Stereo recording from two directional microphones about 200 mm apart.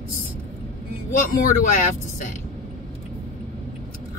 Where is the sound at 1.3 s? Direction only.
40° left (ahead or behind).